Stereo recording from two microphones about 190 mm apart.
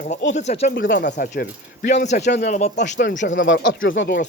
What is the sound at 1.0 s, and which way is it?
Speech, 45° left (ahead or behind).